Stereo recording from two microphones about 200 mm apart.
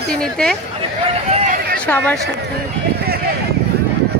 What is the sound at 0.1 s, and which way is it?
Speech, 5° left (ahead or behind).